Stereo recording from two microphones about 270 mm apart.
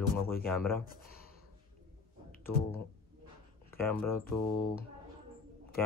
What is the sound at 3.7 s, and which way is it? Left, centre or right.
Speech, centre.